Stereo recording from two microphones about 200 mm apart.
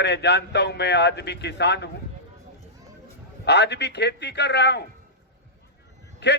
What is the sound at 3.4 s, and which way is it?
A man's voice, 55° left (ahead or behind).